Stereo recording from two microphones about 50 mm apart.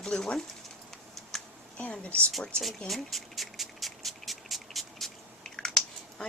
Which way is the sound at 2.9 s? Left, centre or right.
Centre.